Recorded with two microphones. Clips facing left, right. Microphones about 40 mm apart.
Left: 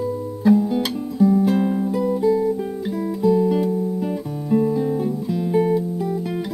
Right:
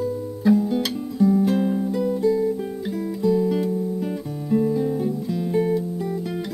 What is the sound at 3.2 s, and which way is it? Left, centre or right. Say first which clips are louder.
Guitar: left 3 dB; centre.